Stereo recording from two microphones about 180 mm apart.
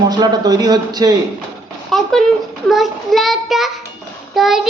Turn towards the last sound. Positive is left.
turn(degrees=0)  # may be behind; listen again after turning